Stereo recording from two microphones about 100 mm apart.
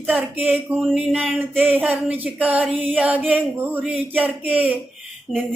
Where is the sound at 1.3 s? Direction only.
15° right (ahead or behind).